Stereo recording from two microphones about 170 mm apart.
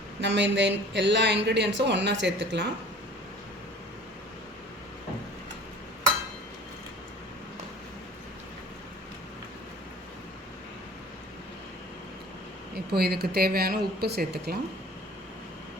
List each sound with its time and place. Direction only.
0.2 s a woman's voice: 90° right
12.7 s a woman's voice: 65° right (ahead or behind)